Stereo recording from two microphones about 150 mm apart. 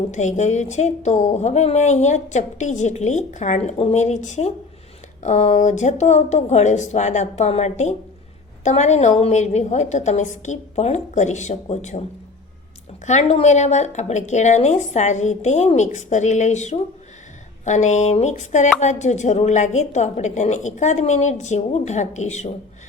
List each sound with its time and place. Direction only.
0.1 s speech: 50° left (ahead or behind)
13.1 s speech: 50° left (ahead or behind)